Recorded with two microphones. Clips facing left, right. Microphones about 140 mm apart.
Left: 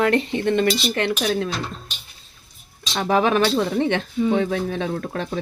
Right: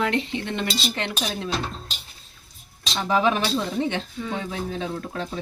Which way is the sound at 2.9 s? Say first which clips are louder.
Left 3 dB; 65° left (ahead or behind).